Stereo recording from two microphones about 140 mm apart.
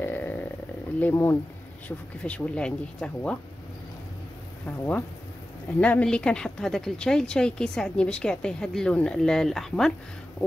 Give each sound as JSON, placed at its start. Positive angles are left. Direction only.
{"t": 0.0, "sound": "a sound", "side_deg": 15}
{"t": 0.9, "sound": "speech", "side_deg": 15}
{"t": 4.6, "sound": "a woman's voice", "side_deg": 10}